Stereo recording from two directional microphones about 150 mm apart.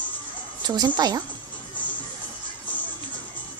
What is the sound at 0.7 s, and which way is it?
Speech, 30° right (ahead or behind).